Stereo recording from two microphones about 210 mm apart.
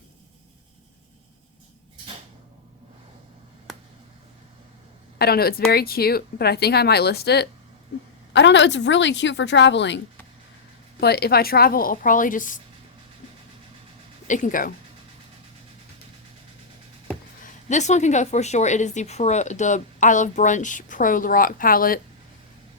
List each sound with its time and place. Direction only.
5.2 s a woman's voice: 45° left (ahead or behind)
11.0 s speech: 50° left (ahead or behind)
14.3 s a woman's voice: 35° left (ahead or behind)
17.4 s a woman's voice: 35° left (ahead or behind)